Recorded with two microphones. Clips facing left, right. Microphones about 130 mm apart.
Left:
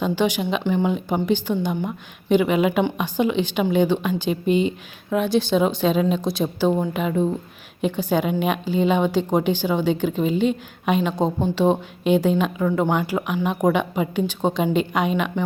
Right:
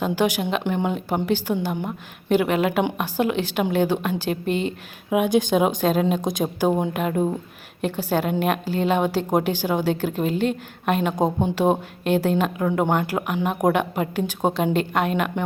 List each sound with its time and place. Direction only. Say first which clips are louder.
0.0 s speech: even; 10° right (ahead or behind)
2.3 s a woman's voice: left 2 dB; centre (ahead or behind)
5.1 s speech: right 1 dB; 15° right (ahead or behind)
6.9 s a woman's voice: left 1 dB; 5° right (ahead or behind)
11.2 s a woman's voice: even; 15° right (ahead or behind)